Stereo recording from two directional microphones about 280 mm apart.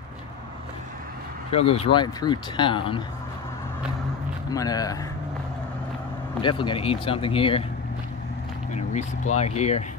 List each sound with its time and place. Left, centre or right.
1.5 s speech: left
4.5 s speech: centre
6.4 s speech: centre
8.7 s speech: left